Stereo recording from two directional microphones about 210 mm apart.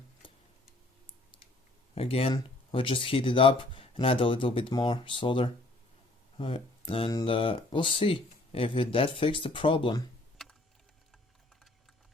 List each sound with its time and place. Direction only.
2.0 s speech: 30° left (ahead or behind)